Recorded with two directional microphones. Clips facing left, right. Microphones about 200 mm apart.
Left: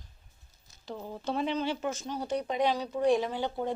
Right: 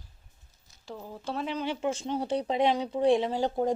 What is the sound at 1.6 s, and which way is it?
Speech, 15° right (ahead or behind).